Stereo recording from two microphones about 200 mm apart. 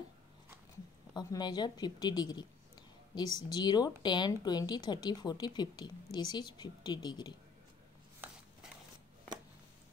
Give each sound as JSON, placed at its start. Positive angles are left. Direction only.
{"t": 1.1, "sound": "a woman's voice", "side_deg": 20}
{"t": 3.4, "sound": "a woman's voice", "side_deg": 20}